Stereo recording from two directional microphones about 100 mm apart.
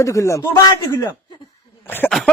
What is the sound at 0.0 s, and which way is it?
A man's voice, 30° left (ahead or behind).